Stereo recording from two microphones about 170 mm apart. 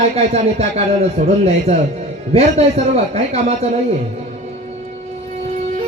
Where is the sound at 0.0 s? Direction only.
40° right (ahead or behind).